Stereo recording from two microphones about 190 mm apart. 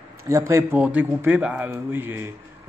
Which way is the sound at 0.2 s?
15° right (ahead or behind).